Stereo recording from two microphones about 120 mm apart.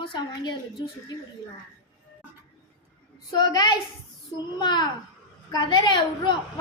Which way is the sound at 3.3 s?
35° left (ahead or behind).